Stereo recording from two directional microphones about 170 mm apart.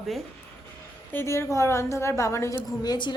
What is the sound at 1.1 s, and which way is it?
A woman's voice, 15° left (ahead or behind).